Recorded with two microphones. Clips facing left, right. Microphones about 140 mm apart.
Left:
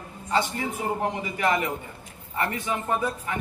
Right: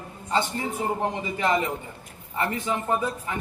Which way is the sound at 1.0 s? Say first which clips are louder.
Right 1 dB; 25° right (ahead or behind).